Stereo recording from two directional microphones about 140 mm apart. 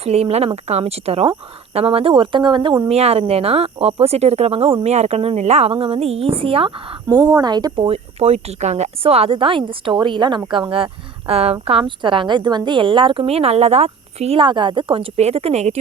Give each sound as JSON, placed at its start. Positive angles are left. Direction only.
{"t": 0.0, "sound": "speech", "side_deg": -45}
{"t": 2.9, "sound": "speech", "side_deg": -45}
{"t": 7.1, "sound": "speech", "side_deg": -25}
{"t": 7.9, "sound": "a woman's voice", "side_deg": -50}
{"t": 15.1, "sound": "speech", "side_deg": -50}